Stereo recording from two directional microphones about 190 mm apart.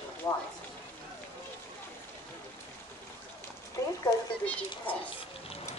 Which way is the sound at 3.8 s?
15° left (ahead or behind).